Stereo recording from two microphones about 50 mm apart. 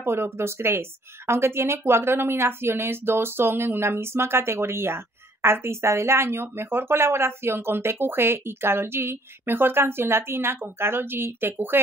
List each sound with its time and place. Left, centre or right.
0.0 s a woman's voice: right